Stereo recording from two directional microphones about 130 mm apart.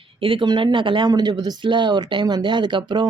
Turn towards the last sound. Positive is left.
turn(degrees=-35)  # may be behind; listen again after turning